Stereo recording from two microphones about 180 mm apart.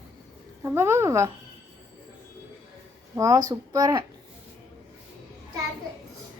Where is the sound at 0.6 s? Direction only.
15° right (ahead or behind).